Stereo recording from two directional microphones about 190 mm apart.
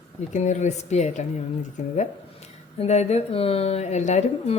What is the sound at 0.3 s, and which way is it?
Speech, 40° left (ahead or behind).